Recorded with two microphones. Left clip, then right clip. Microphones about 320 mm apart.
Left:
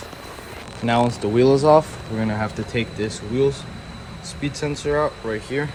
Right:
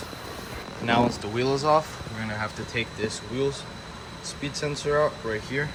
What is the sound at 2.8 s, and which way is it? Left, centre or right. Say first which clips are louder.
Speech: left 3 dB; centre.